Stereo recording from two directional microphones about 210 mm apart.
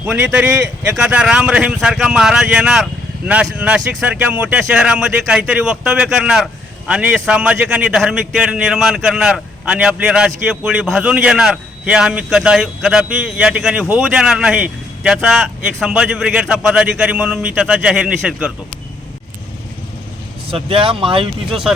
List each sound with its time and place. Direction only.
0.0 s speech: 5° right (ahead or behind)
20.5 s speech: 25° right (ahead or behind)